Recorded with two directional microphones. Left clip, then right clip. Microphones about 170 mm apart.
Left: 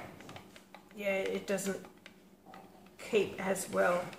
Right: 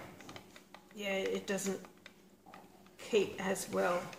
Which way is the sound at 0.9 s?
35° right (ahead or behind).